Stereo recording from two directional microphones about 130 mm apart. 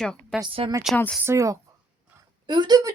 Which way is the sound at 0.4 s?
45° right (ahead or behind).